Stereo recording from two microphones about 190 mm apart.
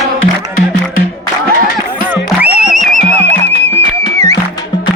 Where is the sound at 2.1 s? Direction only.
5° right (ahead or behind).